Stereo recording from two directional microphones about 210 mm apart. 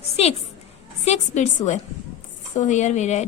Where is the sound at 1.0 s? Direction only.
30° left (ahead or behind).